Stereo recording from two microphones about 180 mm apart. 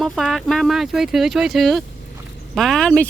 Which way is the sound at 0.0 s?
Centre (ahead or behind).